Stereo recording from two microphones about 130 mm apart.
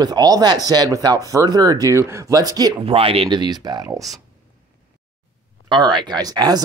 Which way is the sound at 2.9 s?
45° right (ahead or behind).